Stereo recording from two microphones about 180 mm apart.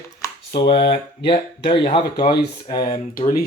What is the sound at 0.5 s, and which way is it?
Speech, 65° left (ahead or behind).